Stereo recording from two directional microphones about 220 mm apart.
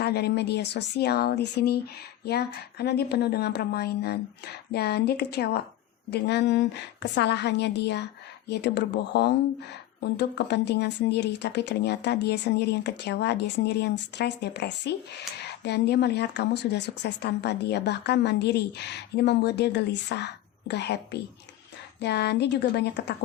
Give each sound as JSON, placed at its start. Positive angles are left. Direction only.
{"t": 0.0, "sound": "a woman's voice", "side_deg": 45}